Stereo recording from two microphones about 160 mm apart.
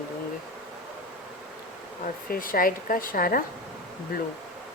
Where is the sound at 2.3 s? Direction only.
60° left (ahead or behind).